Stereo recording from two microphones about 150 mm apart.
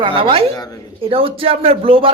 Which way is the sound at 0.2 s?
35° right (ahead or behind).